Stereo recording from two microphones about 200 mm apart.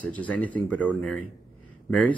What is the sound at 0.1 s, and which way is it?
Speech, 5° left (ahead or behind).